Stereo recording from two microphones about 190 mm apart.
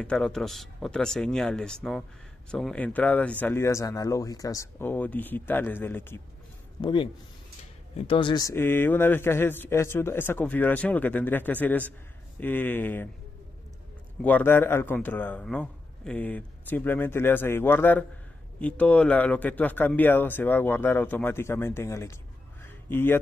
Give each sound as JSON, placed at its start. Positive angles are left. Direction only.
{"t": 0.0, "sound": "speech", "side_deg": 5}
{"t": 6.8, "sound": "a man's voice", "side_deg": 25}
{"t": 8.1, "sound": "speech", "side_deg": 25}
{"t": 14.2, "sound": "speech", "side_deg": 10}
{"t": 22.6, "sound": "a sound", "side_deg": 10}